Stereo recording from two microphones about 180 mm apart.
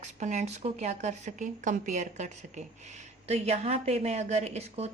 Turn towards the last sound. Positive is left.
turn(degrees=-35)  # may be behind; listen again after turning